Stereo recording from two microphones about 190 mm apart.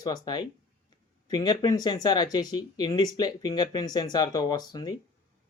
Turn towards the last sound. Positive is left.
turn(degrees=20)  # may be behind; listen again after turning